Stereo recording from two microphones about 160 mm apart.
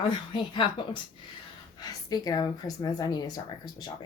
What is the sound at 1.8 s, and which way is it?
A woman's voice, 25° left (ahead or behind).